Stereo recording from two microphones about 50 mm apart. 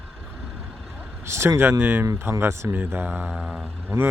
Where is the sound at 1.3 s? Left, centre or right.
Right.